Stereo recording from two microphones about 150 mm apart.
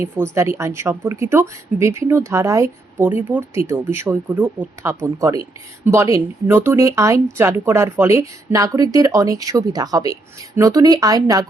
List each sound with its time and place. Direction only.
0.0 s a woman's voice: 15° right (ahead or behind)